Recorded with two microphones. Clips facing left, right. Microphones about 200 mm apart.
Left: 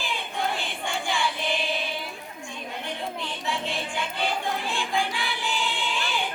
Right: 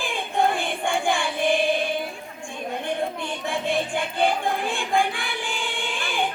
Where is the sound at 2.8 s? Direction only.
50° right (ahead or behind).